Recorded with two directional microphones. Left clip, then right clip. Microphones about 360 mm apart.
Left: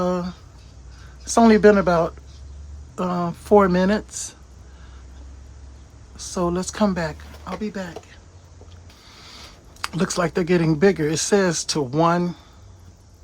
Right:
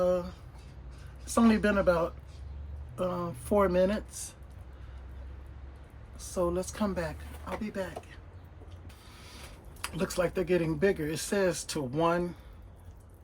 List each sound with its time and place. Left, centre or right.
0.0 s a sound: centre
1.2 s speech: centre
6.1 s speech: left
9.8 s speech: centre